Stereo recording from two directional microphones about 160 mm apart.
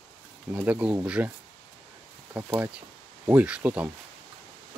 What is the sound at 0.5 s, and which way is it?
Speech, 10° right (ahead or behind).